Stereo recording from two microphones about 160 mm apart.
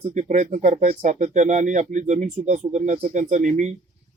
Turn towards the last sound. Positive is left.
turn(degrees=-50)  # may be behind; listen again after turning